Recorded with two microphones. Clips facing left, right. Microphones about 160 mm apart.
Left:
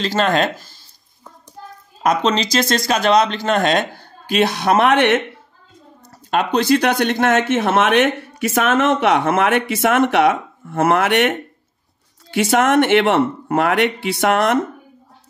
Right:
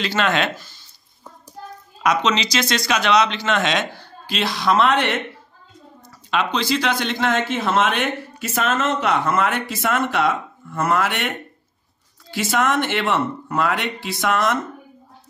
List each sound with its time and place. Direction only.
0.0 s speech: 40° left (ahead or behind)
2.0 s speech: 40° left (ahead or behind); by 5.2 s 60° left (ahead or behind)
6.3 s speech: 55° left (ahead or behind)
12.5 s speech: 65° left (ahead or behind)